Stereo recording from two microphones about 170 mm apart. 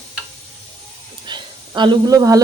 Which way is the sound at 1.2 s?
25° right (ahead or behind).